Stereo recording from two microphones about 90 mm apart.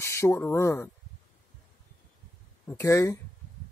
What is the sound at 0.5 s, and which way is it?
Speech, 30° left (ahead or behind).